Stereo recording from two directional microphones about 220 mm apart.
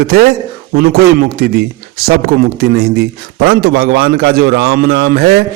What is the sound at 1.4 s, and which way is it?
A man's voice, 45° right (ahead or behind).